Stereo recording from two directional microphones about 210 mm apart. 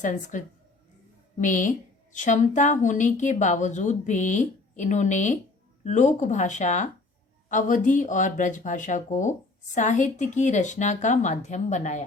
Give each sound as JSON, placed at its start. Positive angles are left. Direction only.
{"t": 0.0, "sound": "a woman's voice", "side_deg": 35}